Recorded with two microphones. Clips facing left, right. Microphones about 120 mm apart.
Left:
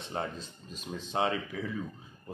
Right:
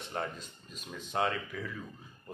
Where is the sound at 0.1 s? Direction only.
30° left (ahead or behind).